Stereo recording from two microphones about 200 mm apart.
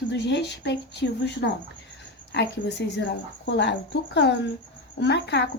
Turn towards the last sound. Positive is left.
turn(degrees=60)  # may be behind; listen again after turning